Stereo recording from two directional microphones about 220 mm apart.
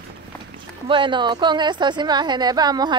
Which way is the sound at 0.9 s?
20° right (ahead or behind).